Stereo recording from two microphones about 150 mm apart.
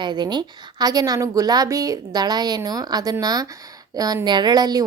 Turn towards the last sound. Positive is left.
turn(degrees=-25)  # may be behind; listen again after turning